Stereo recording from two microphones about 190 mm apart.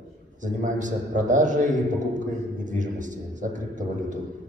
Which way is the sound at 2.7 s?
40° right (ahead or behind).